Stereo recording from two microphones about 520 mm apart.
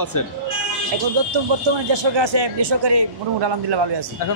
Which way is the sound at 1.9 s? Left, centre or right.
Right.